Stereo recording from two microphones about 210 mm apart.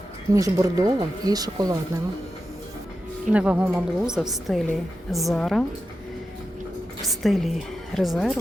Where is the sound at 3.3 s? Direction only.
5° right (ahead or behind).